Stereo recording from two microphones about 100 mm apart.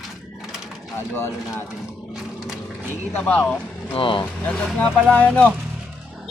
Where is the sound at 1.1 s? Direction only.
25° left (ahead or behind).